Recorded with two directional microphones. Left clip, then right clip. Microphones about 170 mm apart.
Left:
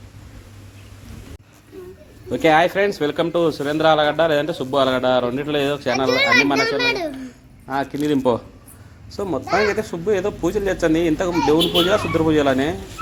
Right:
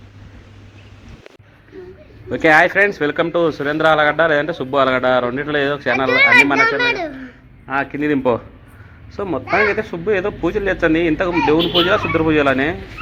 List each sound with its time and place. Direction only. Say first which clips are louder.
2.3 s speech: right 3 dB; 15° left (ahead or behind)
6.6 s a child's voice: right 4 dB; 90° left
7.7 s speech: right 2 dB; 15° left (ahead or behind)